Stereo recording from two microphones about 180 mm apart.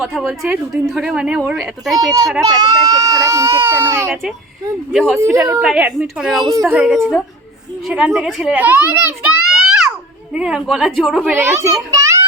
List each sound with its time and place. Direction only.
0.0 s a woman's voice: 5° right (ahead or behind)
2.4 s speech: 20° right (ahead or behind)
5.5 s a woman's voice: 5° right (ahead or behind)
6.4 s speech: 20° right (ahead or behind)
6.7 s a woman's voice: centre (ahead or behind)
11.3 s speech: 15° right (ahead or behind)